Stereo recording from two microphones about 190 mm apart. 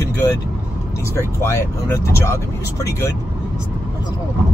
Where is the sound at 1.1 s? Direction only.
15° left (ahead or behind).